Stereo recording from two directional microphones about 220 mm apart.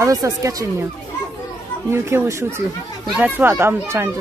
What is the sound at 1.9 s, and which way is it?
Speech, 10° right (ahead or behind).